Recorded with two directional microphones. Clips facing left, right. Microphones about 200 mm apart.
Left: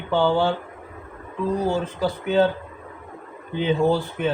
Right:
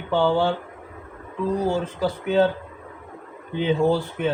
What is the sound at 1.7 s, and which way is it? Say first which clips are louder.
Speech: even; 50° right (ahead or behind).